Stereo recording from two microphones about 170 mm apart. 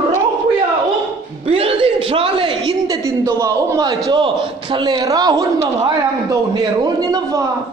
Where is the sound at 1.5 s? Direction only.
35° right (ahead or behind).